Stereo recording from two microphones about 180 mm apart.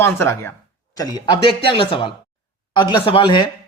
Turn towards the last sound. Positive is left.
turn(degrees=25)  # may be behind; listen again after turning